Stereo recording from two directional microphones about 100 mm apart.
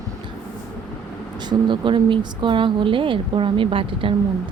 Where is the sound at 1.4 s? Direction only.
50° right (ahead or behind).